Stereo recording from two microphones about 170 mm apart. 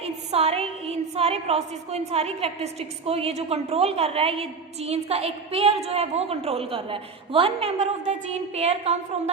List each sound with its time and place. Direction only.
0.0 s a woman's voice: 35° right (ahead or behind)